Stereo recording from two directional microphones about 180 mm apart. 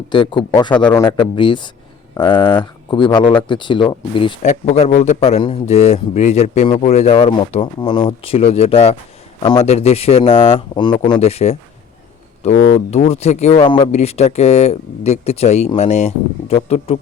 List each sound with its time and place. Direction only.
0.1 s speech: 25° left (ahead or behind)
12.7 s speech: 35° left (ahead or behind)
13.7 s speech: 25° left (ahead or behind)